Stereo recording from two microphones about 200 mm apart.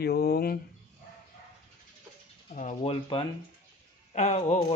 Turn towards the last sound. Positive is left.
turn(degrees=30)  # may be behind; listen again after turning